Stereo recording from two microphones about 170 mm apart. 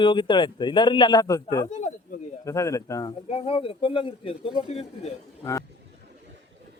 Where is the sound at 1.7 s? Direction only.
45° left (ahead or behind).